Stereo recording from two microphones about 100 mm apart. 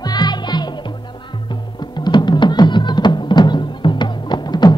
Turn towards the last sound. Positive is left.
turn(degrees=45)  # may be behind; listen again after turning